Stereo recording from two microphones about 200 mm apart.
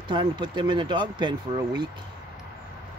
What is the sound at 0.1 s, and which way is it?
Speech, 20° right (ahead or behind).